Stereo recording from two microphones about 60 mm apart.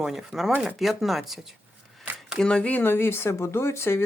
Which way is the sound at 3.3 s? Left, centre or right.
Left.